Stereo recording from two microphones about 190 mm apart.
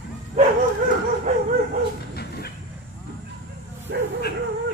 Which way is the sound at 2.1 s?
55° left (ahead or behind).